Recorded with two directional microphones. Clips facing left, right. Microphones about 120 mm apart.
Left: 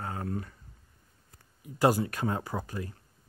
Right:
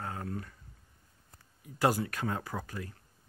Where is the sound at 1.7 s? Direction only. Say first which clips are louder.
Left 4 dB; 15° left (ahead or behind).